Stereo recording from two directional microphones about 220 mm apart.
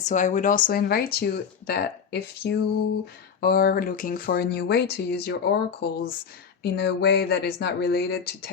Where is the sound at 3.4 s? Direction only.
45° left (ahead or behind).